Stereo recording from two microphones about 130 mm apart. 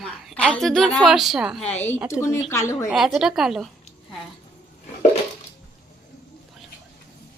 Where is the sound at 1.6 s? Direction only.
15° left (ahead or behind).